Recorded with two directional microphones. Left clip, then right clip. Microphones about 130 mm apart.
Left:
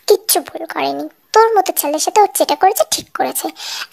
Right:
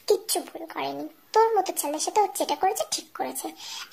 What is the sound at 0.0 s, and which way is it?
A woman's voice, 60° left (ahead or behind).